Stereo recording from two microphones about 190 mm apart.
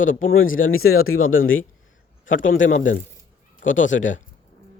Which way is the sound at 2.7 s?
45° left (ahead or behind).